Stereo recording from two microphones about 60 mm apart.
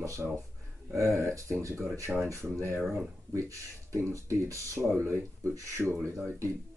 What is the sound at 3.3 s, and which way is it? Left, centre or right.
Speech, right.